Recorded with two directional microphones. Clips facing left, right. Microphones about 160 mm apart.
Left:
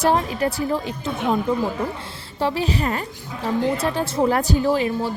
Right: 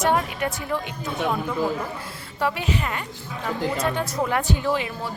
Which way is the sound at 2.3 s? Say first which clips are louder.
Left 3 dB; 30° left (ahead or behind).